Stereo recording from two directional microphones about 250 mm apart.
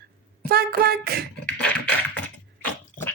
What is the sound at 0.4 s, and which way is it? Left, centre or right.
Speech, right.